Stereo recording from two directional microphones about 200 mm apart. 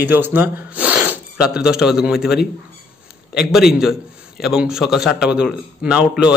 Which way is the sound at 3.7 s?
Centre (ahead or behind).